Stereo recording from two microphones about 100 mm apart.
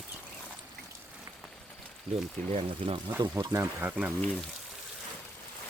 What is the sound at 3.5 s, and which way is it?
Speech, 30° right (ahead or behind).